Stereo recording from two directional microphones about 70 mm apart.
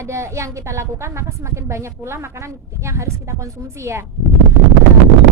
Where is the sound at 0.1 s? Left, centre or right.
Right.